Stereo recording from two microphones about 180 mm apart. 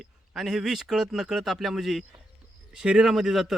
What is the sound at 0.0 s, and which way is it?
A man's voice, centre (ahead or behind).